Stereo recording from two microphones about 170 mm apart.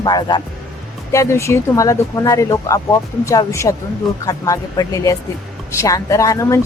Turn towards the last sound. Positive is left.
turn(degrees=20)  # may be behind; listen again after turning